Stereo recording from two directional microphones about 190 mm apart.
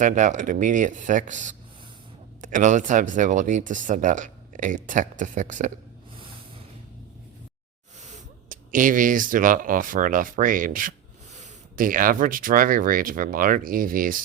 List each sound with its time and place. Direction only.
0.0 s speech: 40° right (ahead or behind)
8.0 s speech: 40° right (ahead or behind)